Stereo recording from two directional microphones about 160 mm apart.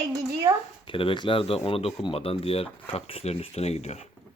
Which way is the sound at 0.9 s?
30° left (ahead or behind).